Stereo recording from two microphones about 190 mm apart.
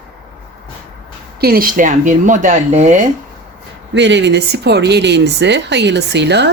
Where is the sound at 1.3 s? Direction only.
55° right (ahead or behind).